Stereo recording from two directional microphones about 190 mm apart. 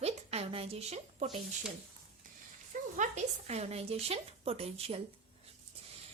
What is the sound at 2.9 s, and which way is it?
A woman's voice, 40° right (ahead or behind).